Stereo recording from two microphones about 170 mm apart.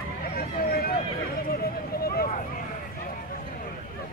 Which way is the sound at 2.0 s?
65° left (ahead or behind).